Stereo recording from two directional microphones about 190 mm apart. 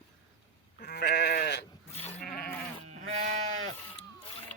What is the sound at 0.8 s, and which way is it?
Goat, 60° left (ahead or behind).